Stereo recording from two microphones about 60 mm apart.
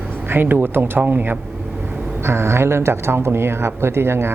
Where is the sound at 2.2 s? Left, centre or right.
Right.